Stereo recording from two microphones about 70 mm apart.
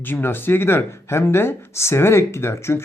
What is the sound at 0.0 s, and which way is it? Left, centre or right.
Speech, left.